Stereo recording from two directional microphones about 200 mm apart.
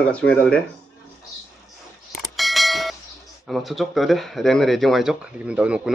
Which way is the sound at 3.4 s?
Centre (ahead or behind).